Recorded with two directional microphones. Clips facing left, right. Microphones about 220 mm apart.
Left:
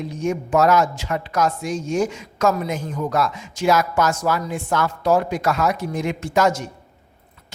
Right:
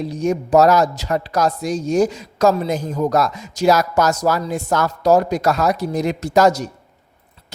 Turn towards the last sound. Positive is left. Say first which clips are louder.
# right 4 dB
turn(degrees=-35)  # may be behind; listen again after turning